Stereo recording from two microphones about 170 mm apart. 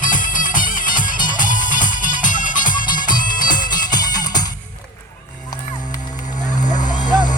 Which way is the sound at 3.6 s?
25° left (ahead or behind).